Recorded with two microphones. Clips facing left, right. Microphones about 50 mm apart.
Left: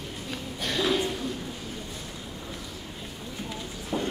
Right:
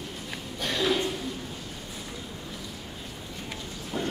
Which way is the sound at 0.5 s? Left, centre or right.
Centre.